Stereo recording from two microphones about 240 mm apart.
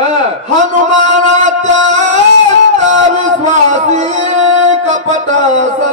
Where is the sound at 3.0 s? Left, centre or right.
Right.